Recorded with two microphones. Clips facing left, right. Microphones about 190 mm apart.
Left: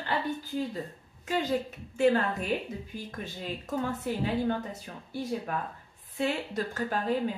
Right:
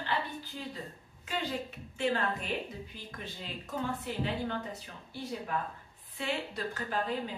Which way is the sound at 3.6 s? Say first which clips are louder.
Left 4 dB; 45° left (ahead or behind).